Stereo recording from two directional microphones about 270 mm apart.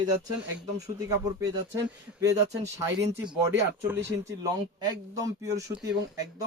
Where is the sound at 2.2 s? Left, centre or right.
Centre.